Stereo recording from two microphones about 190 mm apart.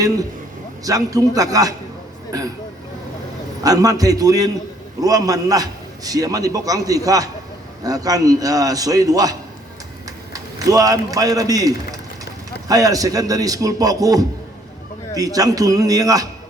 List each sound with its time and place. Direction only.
0.9 s a man's voice: 20° right (ahead or behind)
3.6 s a man's voice: 20° right (ahead or behind)
10.3 s a man's voice: 20° right (ahead or behind)